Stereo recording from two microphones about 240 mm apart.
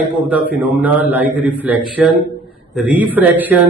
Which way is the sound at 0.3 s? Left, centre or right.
Centre.